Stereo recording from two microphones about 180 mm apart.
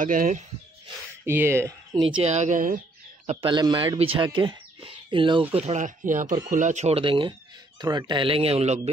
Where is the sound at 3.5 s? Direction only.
25° right (ahead or behind).